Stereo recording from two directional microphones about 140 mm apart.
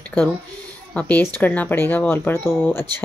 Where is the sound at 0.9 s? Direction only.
10° left (ahead or behind).